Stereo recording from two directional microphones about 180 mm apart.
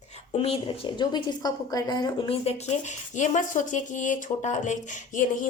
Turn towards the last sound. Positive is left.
turn(degrees=45)  # may be behind; listen again after turning